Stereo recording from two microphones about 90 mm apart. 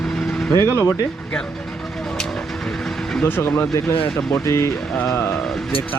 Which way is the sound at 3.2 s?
25° left (ahead or behind).